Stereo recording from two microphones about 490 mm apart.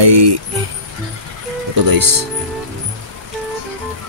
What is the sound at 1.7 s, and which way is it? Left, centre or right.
Speech, right.